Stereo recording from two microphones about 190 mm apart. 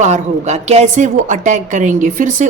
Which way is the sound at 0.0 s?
40° right (ahead or behind).